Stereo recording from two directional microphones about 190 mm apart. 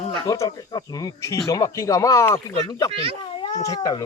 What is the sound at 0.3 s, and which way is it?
A man's voice, 20° left (ahead or behind).